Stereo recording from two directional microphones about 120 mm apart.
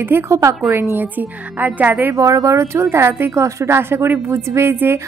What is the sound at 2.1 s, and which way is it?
A woman's voice, 30° right (ahead or behind).